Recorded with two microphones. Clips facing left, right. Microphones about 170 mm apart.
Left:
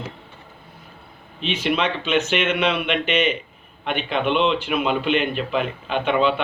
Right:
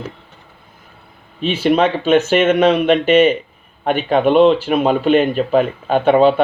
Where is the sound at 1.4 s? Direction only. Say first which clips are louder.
Right 8 dB; 40° right (ahead or behind).